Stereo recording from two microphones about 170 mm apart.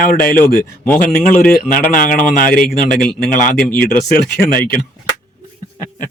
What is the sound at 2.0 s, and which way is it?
Speech, 55° left (ahead or behind).